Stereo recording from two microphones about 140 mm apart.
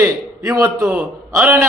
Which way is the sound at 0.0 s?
20° right (ahead or behind).